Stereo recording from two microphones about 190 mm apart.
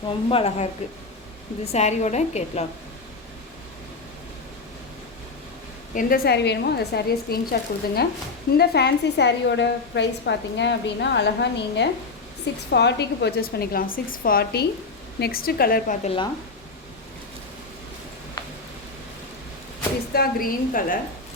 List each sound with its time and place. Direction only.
0.3 s a woman's voice: 30° left (ahead or behind)
5.9 s a woman's voice: 45° left (ahead or behind)
16.0 s speech: 25° left (ahead or behind)
18.4 s a sound: 20° left (ahead or behind)
20.1 s a woman's voice: 50° left (ahead or behind)